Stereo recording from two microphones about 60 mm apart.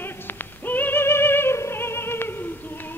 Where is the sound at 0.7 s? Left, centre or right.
Left.